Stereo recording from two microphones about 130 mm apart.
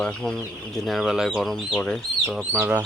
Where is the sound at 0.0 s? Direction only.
5° left (ahead or behind).